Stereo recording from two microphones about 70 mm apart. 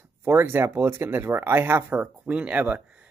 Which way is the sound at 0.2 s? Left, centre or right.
Right.